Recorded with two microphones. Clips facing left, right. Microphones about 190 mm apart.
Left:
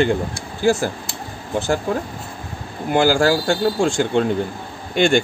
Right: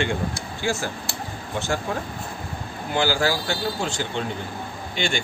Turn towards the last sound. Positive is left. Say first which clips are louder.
# left 10 dB
turn(degrees=50)  # may be behind; listen again after turning